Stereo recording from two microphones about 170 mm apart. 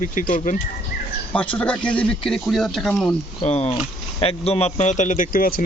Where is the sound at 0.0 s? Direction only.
50° left (ahead or behind).